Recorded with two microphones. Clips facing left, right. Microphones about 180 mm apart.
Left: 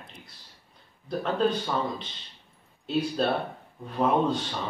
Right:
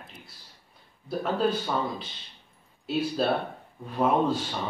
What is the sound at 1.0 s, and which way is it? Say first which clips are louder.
A man's voice: even; 5° right (ahead or behind).